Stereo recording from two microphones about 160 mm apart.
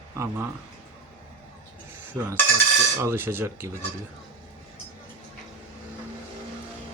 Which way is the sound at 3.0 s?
15° right (ahead or behind).